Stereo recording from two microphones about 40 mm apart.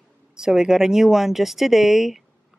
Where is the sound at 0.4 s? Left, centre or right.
Centre.